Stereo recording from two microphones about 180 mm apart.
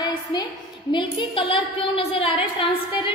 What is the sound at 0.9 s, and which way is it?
A woman's voice, 25° left (ahead or behind).